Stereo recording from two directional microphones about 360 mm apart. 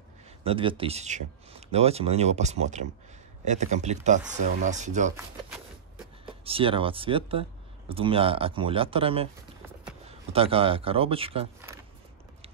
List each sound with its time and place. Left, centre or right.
0.4 s speech: centre
5.1 s a sound: centre
6.2 s speech: centre